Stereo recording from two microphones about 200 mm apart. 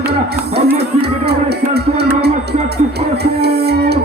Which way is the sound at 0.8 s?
55° right (ahead or behind).